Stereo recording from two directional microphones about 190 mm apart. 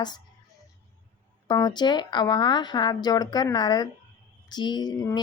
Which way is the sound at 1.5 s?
20° left (ahead or behind).